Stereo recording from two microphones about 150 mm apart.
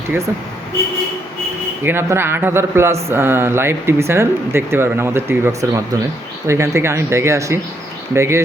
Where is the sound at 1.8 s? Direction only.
15° right (ahead or behind).